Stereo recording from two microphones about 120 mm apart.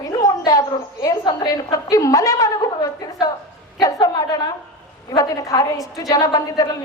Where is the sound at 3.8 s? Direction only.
30° left (ahead or behind).